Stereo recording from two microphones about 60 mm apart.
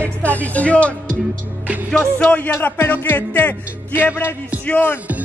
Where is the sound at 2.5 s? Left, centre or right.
Left.